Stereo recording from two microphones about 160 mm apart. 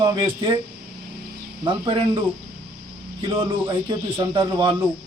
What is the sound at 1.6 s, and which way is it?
Speech, 30° right (ahead or behind).